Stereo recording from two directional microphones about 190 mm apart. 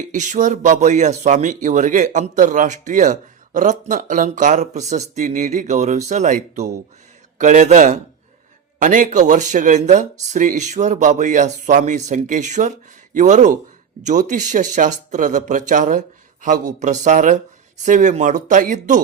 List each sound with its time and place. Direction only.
0.1 s speech: 40° right (ahead or behind)